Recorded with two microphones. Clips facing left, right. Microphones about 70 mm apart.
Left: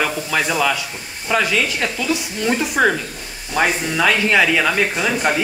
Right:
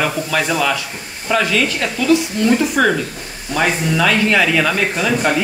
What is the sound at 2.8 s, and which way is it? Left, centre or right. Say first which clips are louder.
Speech: left 1 dB; centre.